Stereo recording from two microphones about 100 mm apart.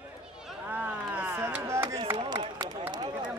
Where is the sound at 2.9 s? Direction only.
45° right (ahead or behind).